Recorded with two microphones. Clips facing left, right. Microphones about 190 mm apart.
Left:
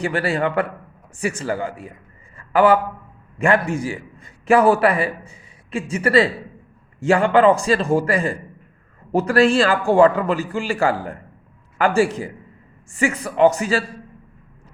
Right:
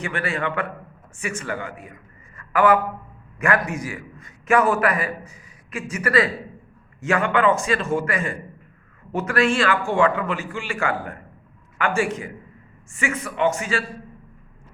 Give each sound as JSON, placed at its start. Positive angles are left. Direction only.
{"t": 0.0, "sound": "a man's voice", "side_deg": 35}